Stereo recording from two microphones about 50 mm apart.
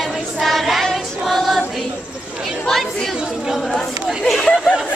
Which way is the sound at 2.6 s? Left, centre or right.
Centre.